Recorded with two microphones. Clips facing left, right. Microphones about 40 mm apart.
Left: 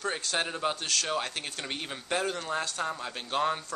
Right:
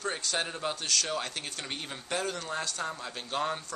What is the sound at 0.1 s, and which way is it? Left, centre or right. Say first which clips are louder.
Speech: left 2 dB; centre.